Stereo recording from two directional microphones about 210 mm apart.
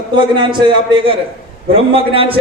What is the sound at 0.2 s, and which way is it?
Speech, 20° right (ahead or behind).